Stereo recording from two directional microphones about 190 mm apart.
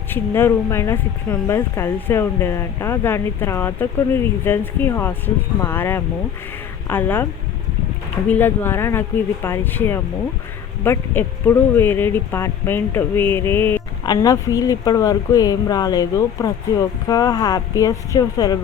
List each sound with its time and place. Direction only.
0.1 s speech: 10° left (ahead or behind)
8.3 s speech: 10° left (ahead or behind)